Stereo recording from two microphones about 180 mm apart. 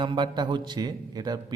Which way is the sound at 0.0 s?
25° right (ahead or behind).